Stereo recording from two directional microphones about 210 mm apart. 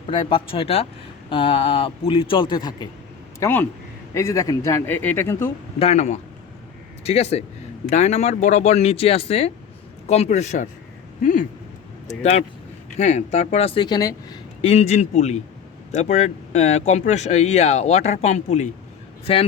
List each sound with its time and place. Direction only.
0.1 s speech: 25° left (ahead or behind)
3.4 s speech: 10° left (ahead or behind)
5.8 s speech: 30° left (ahead or behind)